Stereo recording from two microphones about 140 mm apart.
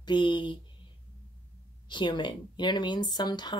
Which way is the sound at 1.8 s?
35° left (ahead or behind).